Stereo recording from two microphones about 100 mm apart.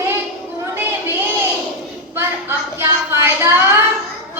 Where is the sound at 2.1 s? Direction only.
25° right (ahead or behind).